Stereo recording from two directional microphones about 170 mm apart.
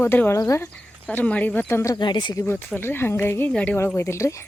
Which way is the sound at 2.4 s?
10° left (ahead or behind).